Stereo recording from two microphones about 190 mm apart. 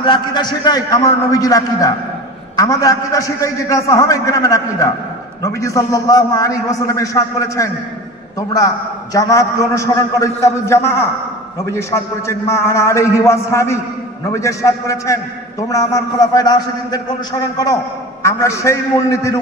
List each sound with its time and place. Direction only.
0.0 s a man's voice: 25° left (ahead or behind)